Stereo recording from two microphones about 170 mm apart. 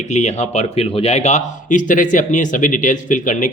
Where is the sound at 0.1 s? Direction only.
40° left (ahead or behind).